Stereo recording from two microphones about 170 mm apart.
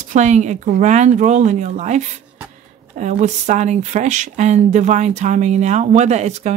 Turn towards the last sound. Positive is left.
turn(degrees=-40)  # may be behind; listen again after turning